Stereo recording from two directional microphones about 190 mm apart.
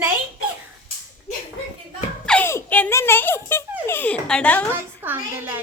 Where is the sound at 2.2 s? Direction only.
10° left (ahead or behind).